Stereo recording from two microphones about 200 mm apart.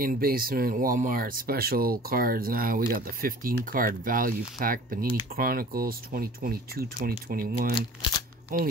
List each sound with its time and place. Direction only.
0.0 s speech: 45° right (ahead or behind)